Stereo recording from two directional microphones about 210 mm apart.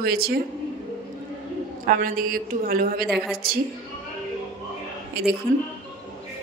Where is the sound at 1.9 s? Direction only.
40° right (ahead or behind).